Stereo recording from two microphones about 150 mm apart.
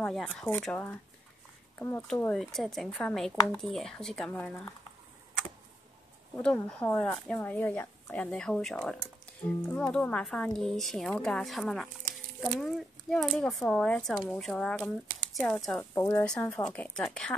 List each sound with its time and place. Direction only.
0.0 s a child's voice: 5° left (ahead or behind)
2.3 s a child's voice: centre (ahead or behind)
6.3 s a child's voice: 10° left (ahead or behind)
15.8 s speech: 15° left (ahead or behind)
16.6 s a child's voice: 5° left (ahead or behind)